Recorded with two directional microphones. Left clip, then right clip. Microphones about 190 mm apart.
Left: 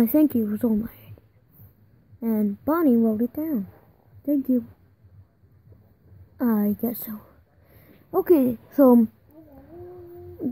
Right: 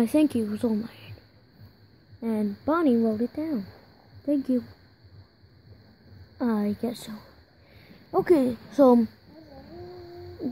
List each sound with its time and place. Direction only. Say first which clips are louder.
0.1 s speech: left 3 dB; 35° left (ahead or behind)
2.1 s speech: left 3 dB; 20° left (ahead or behind)
6.3 s speech: left 3 dB; 25° left (ahead or behind)
8.1 s speech: left 2 dB; 25° left (ahead or behind)